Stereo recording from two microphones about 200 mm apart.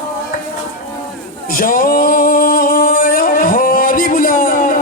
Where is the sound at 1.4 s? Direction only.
45° left (ahead or behind).